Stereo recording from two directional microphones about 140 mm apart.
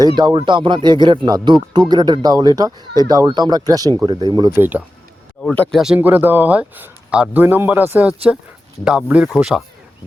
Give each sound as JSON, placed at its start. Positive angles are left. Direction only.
{"t": 0.3, "sound": "speech", "side_deg": -40}
{"t": 4.5, "sound": "speech", "side_deg": -15}
{"t": 5.4, "sound": "speech", "side_deg": 5}